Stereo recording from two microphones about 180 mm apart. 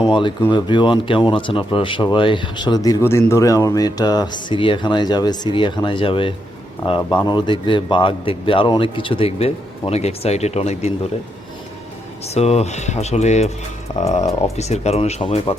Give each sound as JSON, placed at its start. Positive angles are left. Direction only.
{"t": 0.1, "sound": "speech", "side_deg": 25}
{"t": 12.3, "sound": "speech", "side_deg": 35}